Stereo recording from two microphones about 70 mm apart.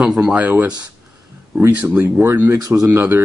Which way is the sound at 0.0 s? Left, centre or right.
Centre.